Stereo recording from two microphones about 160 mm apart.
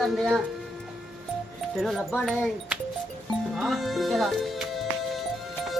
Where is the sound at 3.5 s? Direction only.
Centre (ahead or behind).